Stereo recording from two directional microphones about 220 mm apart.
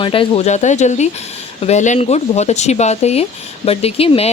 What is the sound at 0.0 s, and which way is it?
Speech, 25° left (ahead or behind).